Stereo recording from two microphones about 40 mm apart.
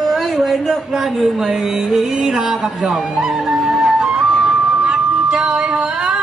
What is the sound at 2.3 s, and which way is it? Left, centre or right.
A woman's voice, centre.